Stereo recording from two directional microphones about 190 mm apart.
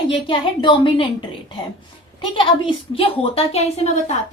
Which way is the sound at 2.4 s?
30° left (ahead or behind).